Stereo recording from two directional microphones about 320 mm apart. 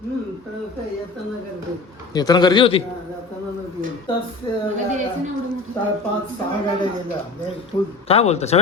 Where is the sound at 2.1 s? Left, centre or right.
Centre.